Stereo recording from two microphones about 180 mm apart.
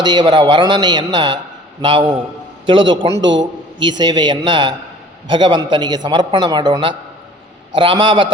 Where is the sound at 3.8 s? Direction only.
25° right (ahead or behind).